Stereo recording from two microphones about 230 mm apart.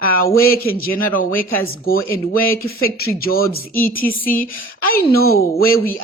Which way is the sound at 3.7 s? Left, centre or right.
Centre.